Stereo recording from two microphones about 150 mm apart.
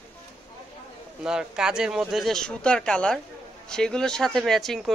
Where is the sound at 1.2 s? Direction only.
5° right (ahead or behind).